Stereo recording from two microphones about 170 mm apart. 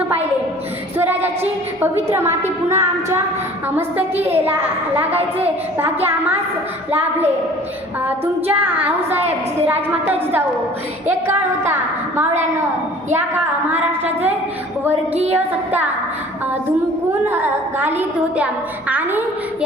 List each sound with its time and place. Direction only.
0.9 s singing: 10° right (ahead or behind)
1.8 s child singing: 15° right (ahead or behind)
11.1 s child singing: 15° right (ahead or behind)
15.4 s child singing: 10° right (ahead or behind)
17.2 s child singing: 10° right (ahead or behind)